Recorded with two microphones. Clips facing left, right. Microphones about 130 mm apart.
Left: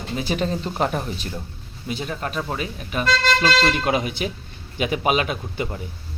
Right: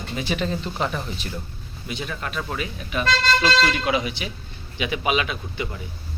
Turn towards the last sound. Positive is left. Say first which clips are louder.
# left 3 dB
turn(degrees=40)  # may be behind; listen again after turning